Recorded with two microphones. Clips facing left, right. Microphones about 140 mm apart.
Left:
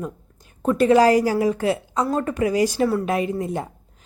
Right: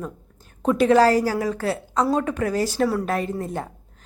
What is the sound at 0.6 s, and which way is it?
Speech, centre (ahead or behind).